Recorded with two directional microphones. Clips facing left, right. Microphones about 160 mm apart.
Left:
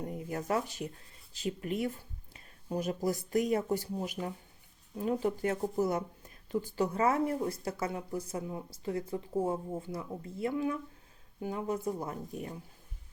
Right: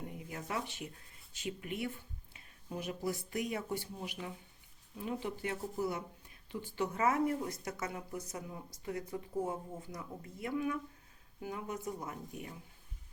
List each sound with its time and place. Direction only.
0.0 s speech: 40° left (ahead or behind)